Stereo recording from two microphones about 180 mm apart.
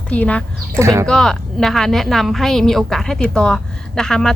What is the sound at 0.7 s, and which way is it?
Insect, 15° right (ahead or behind).